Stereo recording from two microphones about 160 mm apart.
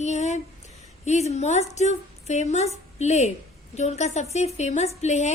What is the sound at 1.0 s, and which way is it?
A woman's voice, 45° left (ahead or behind).